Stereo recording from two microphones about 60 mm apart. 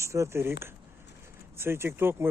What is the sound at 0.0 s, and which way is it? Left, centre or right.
Speech, right.